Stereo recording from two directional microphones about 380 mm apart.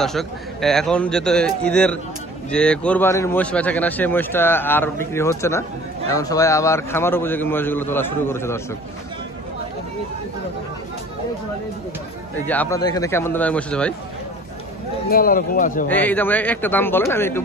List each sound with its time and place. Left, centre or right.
0.0 s speech: centre
12.4 s speech: centre
15.0 s speech: left
15.9 s speech: centre